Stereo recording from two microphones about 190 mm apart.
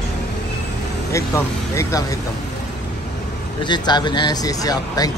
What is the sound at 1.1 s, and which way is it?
Speech, 15° left (ahead or behind).